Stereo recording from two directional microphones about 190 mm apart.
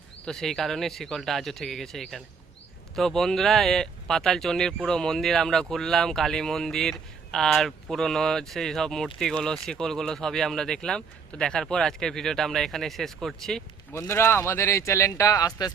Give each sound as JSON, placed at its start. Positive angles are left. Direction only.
{"t": 0.3, "sound": "speech", "side_deg": 0}
{"t": 13.9, "sound": "speech", "side_deg": 15}